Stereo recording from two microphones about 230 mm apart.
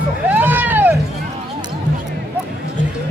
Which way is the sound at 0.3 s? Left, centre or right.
Centre.